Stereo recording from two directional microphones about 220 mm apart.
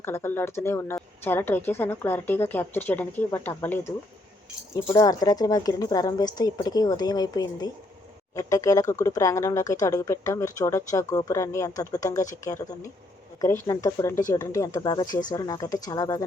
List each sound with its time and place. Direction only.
0.0 s speech: 10° left (ahead or behind)